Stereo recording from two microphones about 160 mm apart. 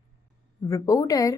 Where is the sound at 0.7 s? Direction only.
20° left (ahead or behind).